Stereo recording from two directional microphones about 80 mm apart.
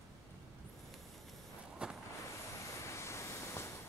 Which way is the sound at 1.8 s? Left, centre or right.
Centre.